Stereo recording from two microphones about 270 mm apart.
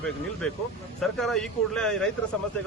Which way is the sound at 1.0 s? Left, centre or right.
Centre.